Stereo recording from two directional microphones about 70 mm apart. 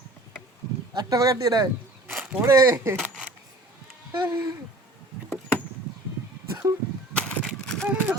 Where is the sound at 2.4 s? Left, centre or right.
Right.